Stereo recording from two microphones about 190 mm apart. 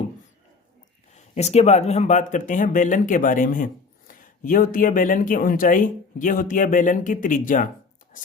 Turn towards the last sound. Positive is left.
turn(degrees=45)  # may be behind; listen again after turning